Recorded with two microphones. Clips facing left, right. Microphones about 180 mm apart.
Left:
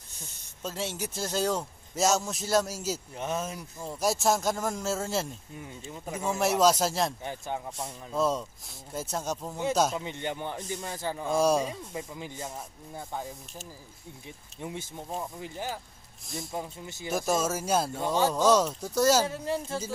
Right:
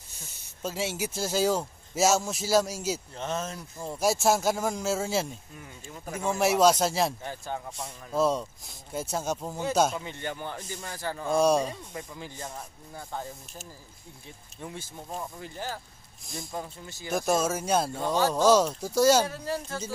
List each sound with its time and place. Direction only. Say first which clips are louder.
0.6 s speech: right 3 dB; 5° right (ahead or behind)
3.2 s speech: even; 10° left (ahead or behind)
3.9 s speech: right 2 dB; centre (ahead or behind)
7.2 s speech: left 1 dB; 20° left (ahead or behind)
7.7 s speech: right 2 dB; centre (ahead or behind)
9.9 s speech: left 2 dB; 20° left (ahead or behind)
11.2 s speech: right 2 dB; 5° left (ahead or behind)
14.6 s speech: left 2 dB; 20° left (ahead or behind)
16.3 s speech: left 1 dB; 5° left (ahead or behind)
19.2 s speech: left 1 dB; 20° left (ahead or behind)